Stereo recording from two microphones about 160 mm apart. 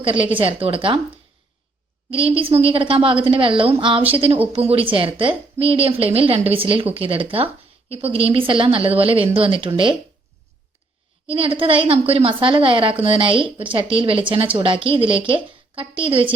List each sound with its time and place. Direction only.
0.0 s a woman's voice: 35° right (ahead or behind)
2.0 s a woman's voice: 35° right (ahead or behind)
11.3 s a woman's voice: 35° right (ahead or behind)